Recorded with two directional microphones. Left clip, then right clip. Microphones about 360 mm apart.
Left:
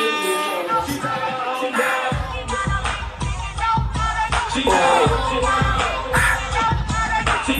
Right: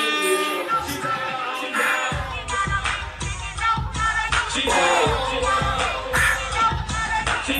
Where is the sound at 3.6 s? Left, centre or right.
Centre.